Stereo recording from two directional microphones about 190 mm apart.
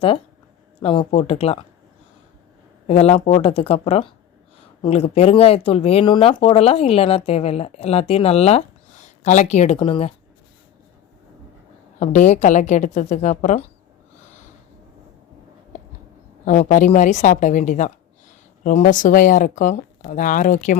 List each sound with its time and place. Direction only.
0.8 s speech: 30° left (ahead or behind)
2.8 s speech: 30° left (ahead or behind)
11.9 s speech: 40° left (ahead or behind)
16.5 s a woman's voice: 45° left (ahead or behind)